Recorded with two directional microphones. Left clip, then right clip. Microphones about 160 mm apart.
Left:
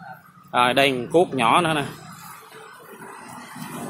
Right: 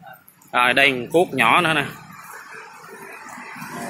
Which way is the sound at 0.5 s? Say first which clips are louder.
Right 2 dB; 10° left (ahead or behind).